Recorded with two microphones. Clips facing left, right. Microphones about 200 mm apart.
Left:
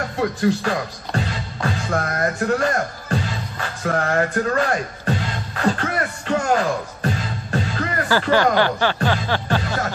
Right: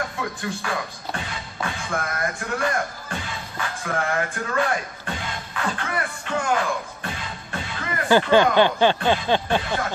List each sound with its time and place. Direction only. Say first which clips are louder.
0.2 s speech: left 10 dB; 40° left (ahead or behind)
3.8 s music: left 6 dB; 40° left (ahead or behind)
8.1 s speech: right 2 dB; 20° right (ahead or behind)